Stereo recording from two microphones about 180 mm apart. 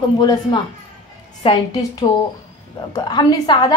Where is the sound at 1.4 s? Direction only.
30° left (ahead or behind).